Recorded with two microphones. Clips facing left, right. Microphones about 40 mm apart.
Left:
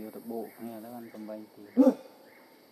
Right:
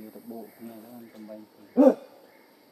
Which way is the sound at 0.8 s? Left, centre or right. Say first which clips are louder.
Left 3 dB; left.